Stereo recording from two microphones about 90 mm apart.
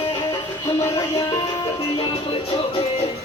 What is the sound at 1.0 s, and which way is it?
Music, 45° left (ahead or behind).